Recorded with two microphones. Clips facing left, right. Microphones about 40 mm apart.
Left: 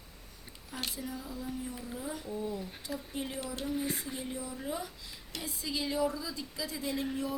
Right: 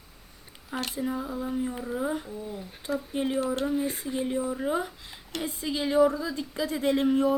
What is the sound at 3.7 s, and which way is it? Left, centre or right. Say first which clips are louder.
Speech: right 6 dB; centre.